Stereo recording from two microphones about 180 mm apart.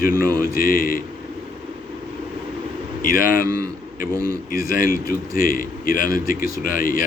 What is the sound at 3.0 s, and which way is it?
Speech, 50° left (ahead or behind).